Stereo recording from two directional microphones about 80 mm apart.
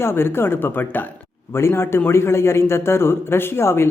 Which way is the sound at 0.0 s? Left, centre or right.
Left.